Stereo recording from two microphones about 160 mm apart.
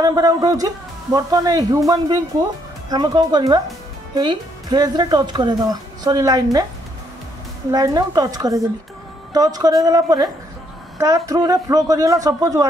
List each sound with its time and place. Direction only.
0.0 s speech: 25° right (ahead or behind)
2.9 s speech: 25° right (ahead or behind)
7.7 s speech: 25° right (ahead or behind)